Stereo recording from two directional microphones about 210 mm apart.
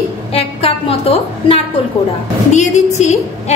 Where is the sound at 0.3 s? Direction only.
30° left (ahead or behind).